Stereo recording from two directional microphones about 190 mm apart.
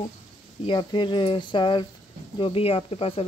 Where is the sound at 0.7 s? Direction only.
25° left (ahead or behind).